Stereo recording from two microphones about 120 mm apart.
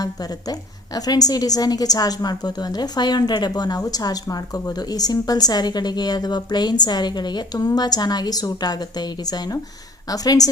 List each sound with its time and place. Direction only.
0.0 s a woman's voice: 35° left (ahead or behind)